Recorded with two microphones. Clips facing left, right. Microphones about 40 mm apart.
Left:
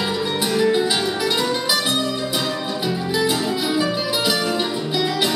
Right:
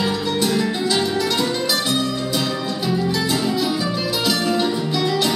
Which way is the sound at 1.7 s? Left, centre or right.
Left.